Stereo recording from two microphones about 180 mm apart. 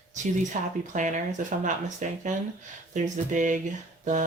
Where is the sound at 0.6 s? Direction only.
45° right (ahead or behind).